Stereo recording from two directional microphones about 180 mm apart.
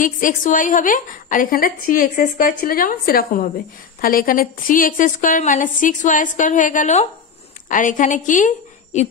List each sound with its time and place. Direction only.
0.0 s a woman's voice: 50° left (ahead or behind)